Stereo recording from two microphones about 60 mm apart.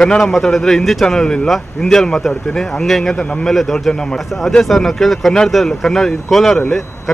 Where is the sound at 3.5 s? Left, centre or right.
Centre.